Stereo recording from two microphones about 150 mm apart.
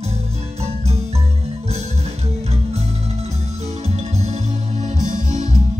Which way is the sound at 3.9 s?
45° right (ahead or behind).